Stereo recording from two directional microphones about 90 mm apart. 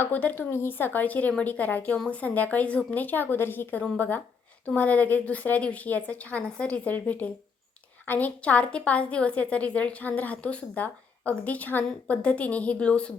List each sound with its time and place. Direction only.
0.0 s a woman's voice: 20° left (ahead or behind)